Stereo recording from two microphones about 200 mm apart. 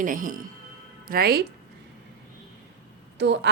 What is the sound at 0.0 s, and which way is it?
A woman's voice, 40° right (ahead or behind).